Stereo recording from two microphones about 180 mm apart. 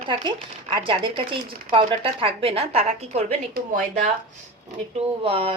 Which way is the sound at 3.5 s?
50° right (ahead or behind).